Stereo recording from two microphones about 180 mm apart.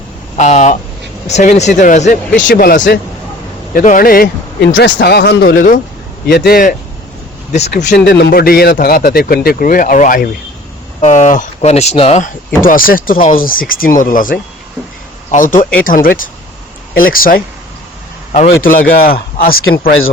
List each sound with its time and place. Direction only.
0.3 s speech: 40° left (ahead or behind)
4.7 s a man's voice: 65° left (ahead or behind)
7.9 s a man's voice: 70° left (ahead or behind)
8.3 s a man's voice: 55° left (ahead or behind); by 12.3 s 35° left (ahead or behind)
12.6 s speech: 50° left (ahead or behind)
13.1 s speech: 30° left (ahead or behind)
13.4 s speech: 50° left (ahead or behind)
18.3 s speech: 40° left (ahead or behind)
19.6 s a man's voice: 75° left (ahead or behind)